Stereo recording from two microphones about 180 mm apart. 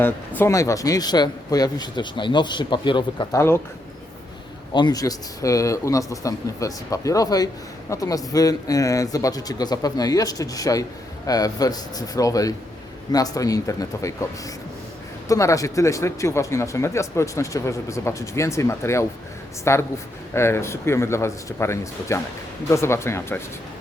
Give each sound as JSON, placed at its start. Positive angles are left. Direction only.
{"t": 0.0, "sound": "speech", "side_deg": 15}
{"t": 4.7, "sound": "speech", "side_deg": 25}
{"t": 15.3, "sound": "speech", "side_deg": 20}